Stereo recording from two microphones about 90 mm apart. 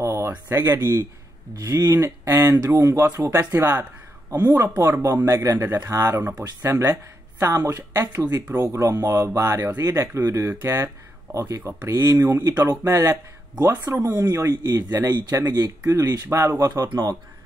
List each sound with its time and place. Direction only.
0.0 s a sound: 30° right (ahead or behind)
0.5 s speech: 30° right (ahead or behind)
1.7 s speech: 40° right (ahead or behind)
4.8 s speech: 25° right (ahead or behind)
15.3 s speech: 40° right (ahead or behind)